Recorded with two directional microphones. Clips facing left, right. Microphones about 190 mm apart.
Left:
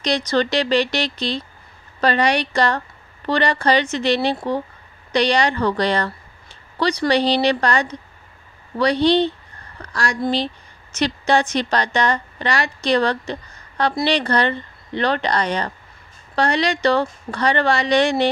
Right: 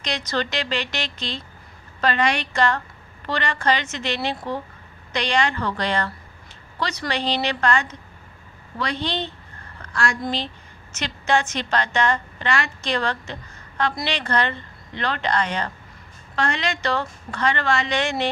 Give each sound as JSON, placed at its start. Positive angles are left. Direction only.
{"t": 0.0, "sound": "a woman's voice", "side_deg": 35}